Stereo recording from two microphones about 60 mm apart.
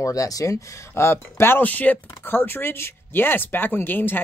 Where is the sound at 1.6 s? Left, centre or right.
Left.